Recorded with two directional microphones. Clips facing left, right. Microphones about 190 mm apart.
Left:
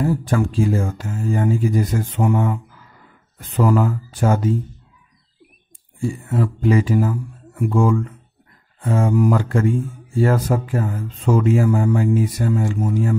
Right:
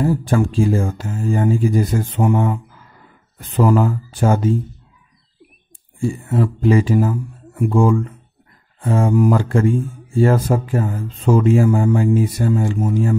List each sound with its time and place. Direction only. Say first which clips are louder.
0.0 s speech: right 2 dB; 30° right (ahead or behind)
5.9 s speech: right 3 dB; 30° right (ahead or behind)